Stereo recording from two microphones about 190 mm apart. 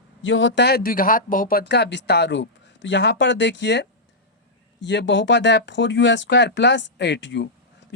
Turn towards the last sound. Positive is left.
turn(degrees=70)  # may be behind; listen again after turning